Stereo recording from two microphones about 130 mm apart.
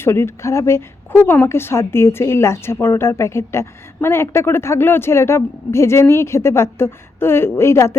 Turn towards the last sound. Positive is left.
turn(degrees=20)  # may be behind; listen again after turning